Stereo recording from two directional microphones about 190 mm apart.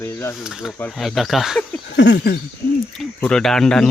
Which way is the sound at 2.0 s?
65° left (ahead or behind).